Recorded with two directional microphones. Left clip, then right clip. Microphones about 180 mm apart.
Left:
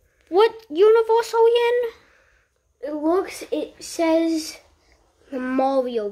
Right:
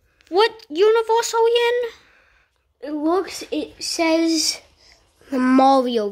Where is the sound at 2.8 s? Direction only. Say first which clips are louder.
Right 1 dB; 45° right (ahead or behind).